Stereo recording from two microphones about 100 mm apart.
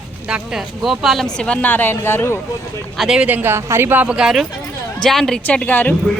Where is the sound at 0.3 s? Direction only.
10° right (ahead or behind); by 2.4 s 25° left (ahead or behind).